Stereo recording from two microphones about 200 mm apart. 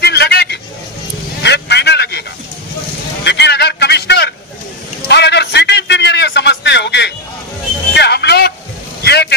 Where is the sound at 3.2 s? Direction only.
60° left (ahead or behind).